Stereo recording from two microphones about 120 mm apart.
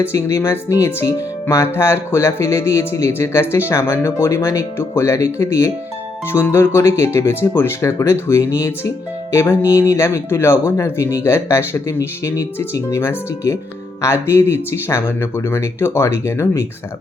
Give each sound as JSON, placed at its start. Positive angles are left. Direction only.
{"t": 0.0, "sound": "speech", "side_deg": 20}